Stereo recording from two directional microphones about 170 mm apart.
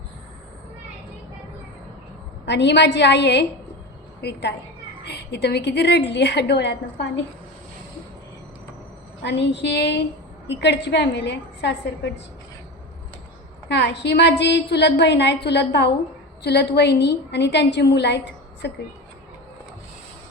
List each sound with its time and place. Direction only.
2.5 s a woman's voice: 90° left
9.2 s a woman's voice: 90° left
13.7 s a woman's voice: 80° left